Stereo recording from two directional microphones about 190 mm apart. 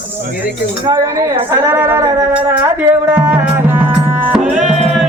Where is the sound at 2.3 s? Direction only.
10° right (ahead or behind).